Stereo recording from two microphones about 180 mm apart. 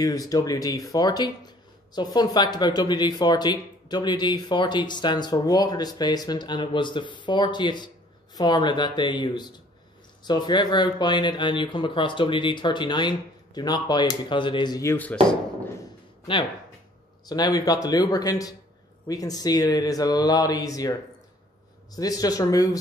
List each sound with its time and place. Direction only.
0.0 s speech: 20° left (ahead or behind)
17.3 s speech: 20° left (ahead or behind)
21.9 s speech: 20° left (ahead or behind)